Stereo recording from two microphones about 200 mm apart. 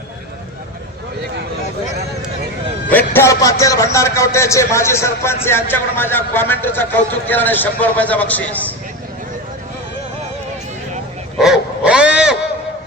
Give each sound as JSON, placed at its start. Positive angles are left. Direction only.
{"t": 2.9, "sound": "a man's voice", "side_deg": 15}
{"t": 11.3, "sound": "dog", "side_deg": 0}